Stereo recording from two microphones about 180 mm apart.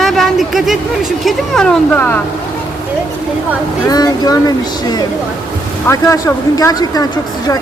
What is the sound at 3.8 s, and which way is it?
Speech, 20° left (ahead or behind).